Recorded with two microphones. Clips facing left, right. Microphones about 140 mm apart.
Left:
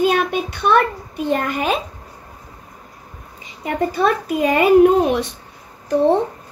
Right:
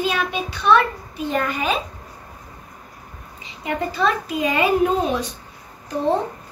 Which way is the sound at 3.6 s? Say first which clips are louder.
Left 3 dB; 50° left (ahead or behind).